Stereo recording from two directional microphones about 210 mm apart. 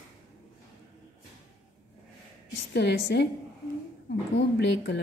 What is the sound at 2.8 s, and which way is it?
Speech, 55° left (ahead or behind).